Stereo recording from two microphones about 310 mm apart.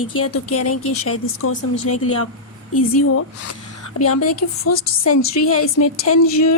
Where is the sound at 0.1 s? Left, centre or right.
Left.